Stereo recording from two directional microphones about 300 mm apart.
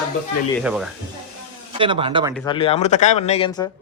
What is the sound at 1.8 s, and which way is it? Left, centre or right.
Speech, centre.